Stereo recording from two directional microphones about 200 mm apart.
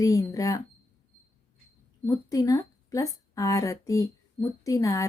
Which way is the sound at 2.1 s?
15° left (ahead or behind).